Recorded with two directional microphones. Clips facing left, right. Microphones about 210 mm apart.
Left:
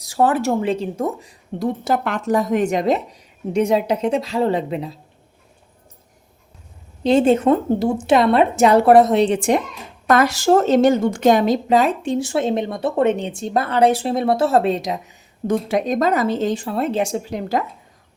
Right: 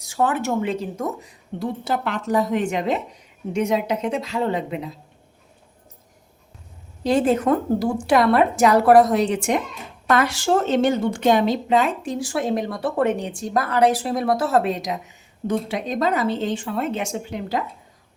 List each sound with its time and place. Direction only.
0.0 s a woman's voice: 35° left (ahead or behind)
1.8 s a woman's voice: 45° left (ahead or behind)
7.0 s a woman's voice: 25° left (ahead or behind)
15.4 s a woman's voice: 45° left (ahead or behind)